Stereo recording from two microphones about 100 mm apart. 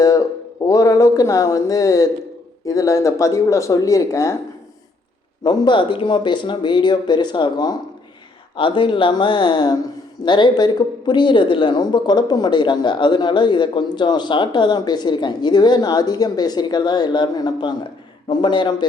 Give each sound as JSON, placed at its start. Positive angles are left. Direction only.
{"t": 0.0, "sound": "a sound", "side_deg": 35}
{"t": 0.7, "sound": "speech", "side_deg": 35}
{"t": 5.4, "sound": "speech", "side_deg": 50}
{"t": 8.5, "sound": "speech", "side_deg": 55}